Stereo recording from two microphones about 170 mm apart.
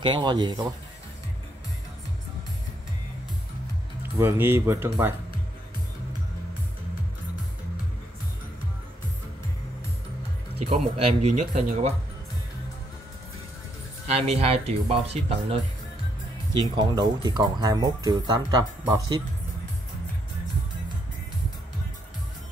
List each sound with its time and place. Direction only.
0.0 s speech: 25° right (ahead or behind)
4.2 s speech: 10° right (ahead or behind)
10.6 s speech: 40° right (ahead or behind)
14.1 s speech: 35° right (ahead or behind)
16.7 s speech: 25° right (ahead or behind)